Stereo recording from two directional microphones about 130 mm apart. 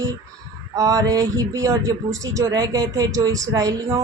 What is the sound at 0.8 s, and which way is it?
Speech, 25° right (ahead or behind).